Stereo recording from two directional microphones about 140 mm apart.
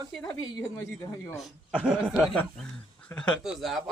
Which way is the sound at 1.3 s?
Centre (ahead or behind).